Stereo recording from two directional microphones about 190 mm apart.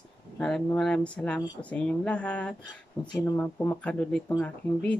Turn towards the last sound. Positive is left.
turn(degrees=10)  # may be behind; listen again after turning